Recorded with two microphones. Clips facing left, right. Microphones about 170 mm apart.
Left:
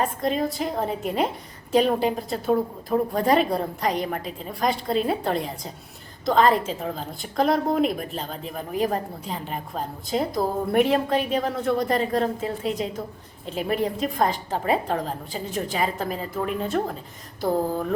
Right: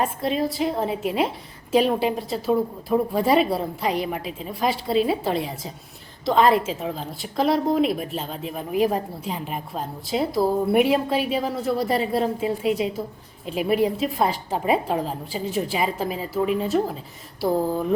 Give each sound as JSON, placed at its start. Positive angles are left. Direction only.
{"t": 0.3, "sound": "a woman's voice", "side_deg": 0}
{"t": 4.2, "sound": "a woman's voice", "side_deg": 40}
{"t": 4.6, "sound": "a woman's voice", "side_deg": -5}